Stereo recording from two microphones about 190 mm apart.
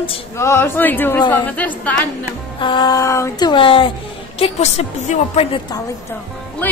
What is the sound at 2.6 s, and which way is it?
A woman's voice, 25° left (ahead or behind).